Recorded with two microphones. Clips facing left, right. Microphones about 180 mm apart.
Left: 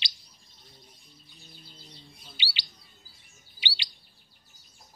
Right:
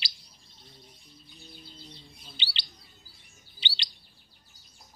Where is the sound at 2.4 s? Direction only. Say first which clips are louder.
Left 1 dB; 10° left (ahead or behind).